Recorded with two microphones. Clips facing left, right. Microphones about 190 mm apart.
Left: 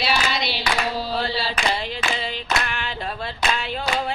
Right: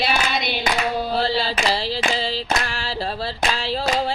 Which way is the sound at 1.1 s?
30° right (ahead or behind).